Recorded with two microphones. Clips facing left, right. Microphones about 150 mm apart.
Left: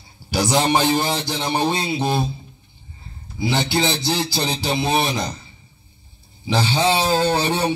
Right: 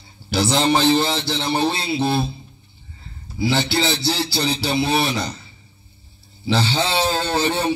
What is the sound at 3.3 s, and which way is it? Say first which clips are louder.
A man's voice: right 1 dB; 20° left (ahead or behind).